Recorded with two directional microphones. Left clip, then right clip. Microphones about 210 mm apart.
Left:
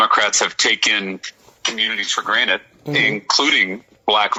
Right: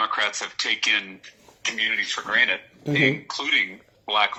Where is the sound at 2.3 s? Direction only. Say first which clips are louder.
Left 2 dB; 35° left (ahead or behind).